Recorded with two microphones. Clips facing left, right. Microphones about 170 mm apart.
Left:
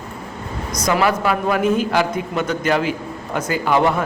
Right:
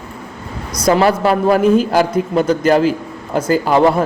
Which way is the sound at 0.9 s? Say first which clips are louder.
Right 5 dB; 35° right (ahead or behind).